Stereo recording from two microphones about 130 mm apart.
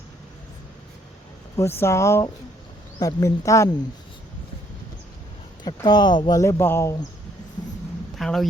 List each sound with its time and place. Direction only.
1.5 s speech: 20° left (ahead or behind)
5.6 s speech: 35° left (ahead or behind)
6.4 s speech: 20° left (ahead or behind)
8.1 s a sound: centre (ahead or behind)